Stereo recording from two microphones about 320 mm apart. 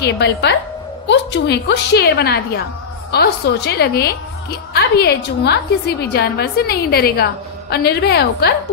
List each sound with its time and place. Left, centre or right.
0.0 s a woman's voice: left